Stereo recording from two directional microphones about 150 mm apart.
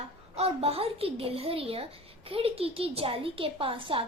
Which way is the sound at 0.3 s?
40° right (ahead or behind).